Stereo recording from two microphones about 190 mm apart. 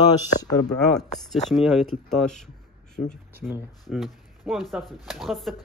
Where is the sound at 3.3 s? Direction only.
10° right (ahead or behind).